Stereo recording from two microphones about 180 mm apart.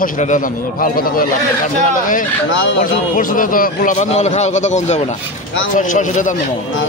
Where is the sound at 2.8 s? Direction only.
50° left (ahead or behind).